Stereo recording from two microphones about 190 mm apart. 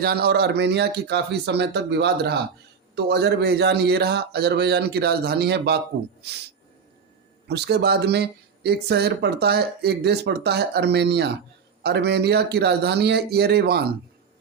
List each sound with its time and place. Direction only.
0.0 s speech: 55° right (ahead or behind)
7.4 s speech: 60° right (ahead or behind)